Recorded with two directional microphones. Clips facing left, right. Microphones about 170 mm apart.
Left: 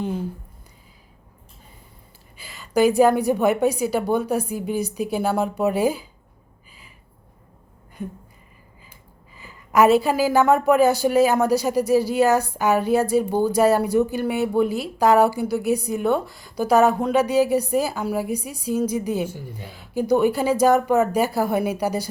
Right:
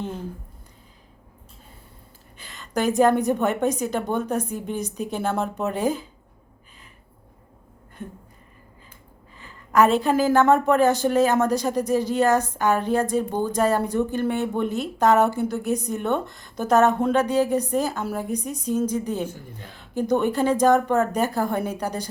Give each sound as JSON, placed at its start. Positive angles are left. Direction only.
{"t": 2.4, "sound": "a sound", "side_deg": 5}
{"t": 3.2, "sound": "a woman's voice", "side_deg": 5}
{"t": 9.4, "sound": "a woman's voice", "side_deg": 10}